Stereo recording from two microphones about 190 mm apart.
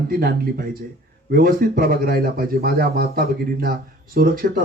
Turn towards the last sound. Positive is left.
turn(degrees=-55)  # may be behind; listen again after turning